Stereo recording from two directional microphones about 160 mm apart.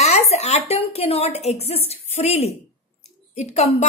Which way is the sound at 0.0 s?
45° left (ahead or behind).